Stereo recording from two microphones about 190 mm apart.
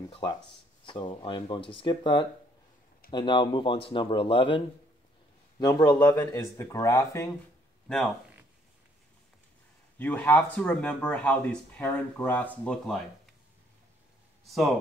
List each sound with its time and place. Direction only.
0.8 s speech: 25° left (ahead or behind)
7.9 s speech: centre (ahead or behind)
9.9 s speech: 10° left (ahead or behind)